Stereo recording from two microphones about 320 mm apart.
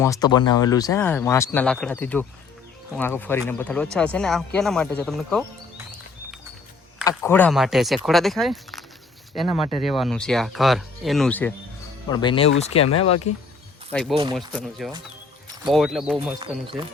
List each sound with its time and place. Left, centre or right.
0.0 s speech: centre
7.1 s speech: centre
13.9 s speech: centre